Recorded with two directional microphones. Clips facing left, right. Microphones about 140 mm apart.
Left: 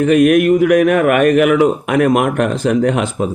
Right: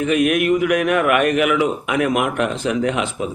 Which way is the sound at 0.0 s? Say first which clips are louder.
Left 7 dB; 50° left (ahead or behind).